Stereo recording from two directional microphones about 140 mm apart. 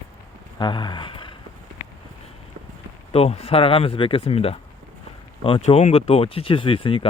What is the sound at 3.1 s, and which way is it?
Speech, 45° left (ahead or behind).